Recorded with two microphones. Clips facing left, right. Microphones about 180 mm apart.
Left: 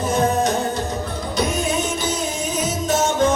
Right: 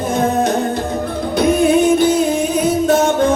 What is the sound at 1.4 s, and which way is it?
Music, 60° right (ahead or behind).